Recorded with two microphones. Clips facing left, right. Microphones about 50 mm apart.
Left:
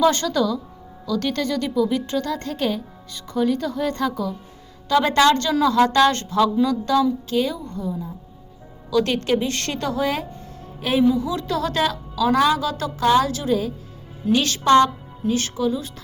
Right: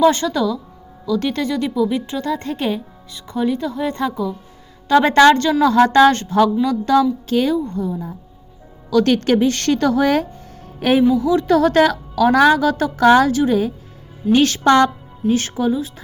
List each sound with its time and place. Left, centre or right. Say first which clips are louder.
0.1 s a woman's voice: right 2 dB; centre
3.3 s a woman's voice: right 1 dB; centre
4.9 s a woman's voice: right 5 dB; right
8.9 s speech: right 5 dB; right
11.3 s a woman's voice: right 9 dB; right
13.0 s speech: right 5 dB; right
13.3 s speech: right 5 dB; right
14.6 s speech: even; right
15.3 s speech: right 4 dB; right